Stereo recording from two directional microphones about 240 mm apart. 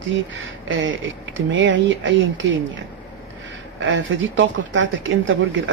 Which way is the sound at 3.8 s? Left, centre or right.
Right.